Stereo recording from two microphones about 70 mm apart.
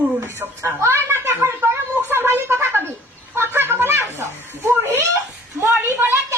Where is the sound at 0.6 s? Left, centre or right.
Right.